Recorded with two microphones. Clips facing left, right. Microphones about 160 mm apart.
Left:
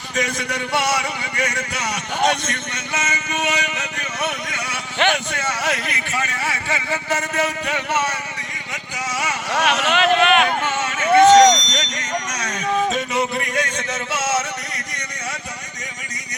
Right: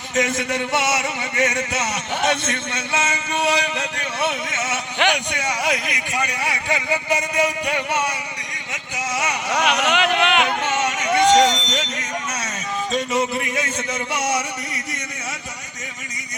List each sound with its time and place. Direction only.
0.2 s a man's voice: 20° right (ahead or behind)
11.0 s vehicle: 55° left (ahead or behind)
11.7 s music: 10° right (ahead or behind)